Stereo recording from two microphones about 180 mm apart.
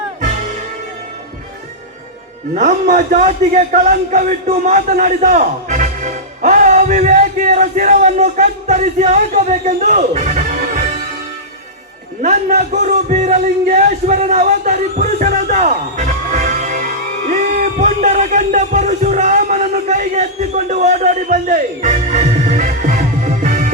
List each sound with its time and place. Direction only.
2.6 s a man's voice: 40° right (ahead or behind)
12.2 s music: 40° right (ahead or behind)